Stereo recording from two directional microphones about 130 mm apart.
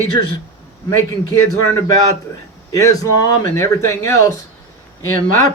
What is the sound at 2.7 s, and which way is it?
Speech, 25° left (ahead or behind).